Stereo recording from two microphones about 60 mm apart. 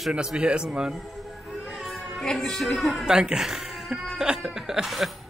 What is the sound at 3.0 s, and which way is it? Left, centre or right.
Speech, centre.